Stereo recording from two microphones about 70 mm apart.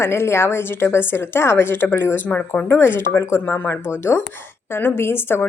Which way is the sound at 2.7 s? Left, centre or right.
Left.